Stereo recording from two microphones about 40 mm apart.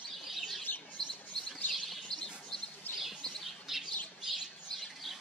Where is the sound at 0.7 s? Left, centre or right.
Left.